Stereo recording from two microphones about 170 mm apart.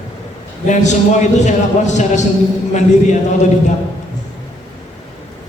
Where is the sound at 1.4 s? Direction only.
45° left (ahead or behind).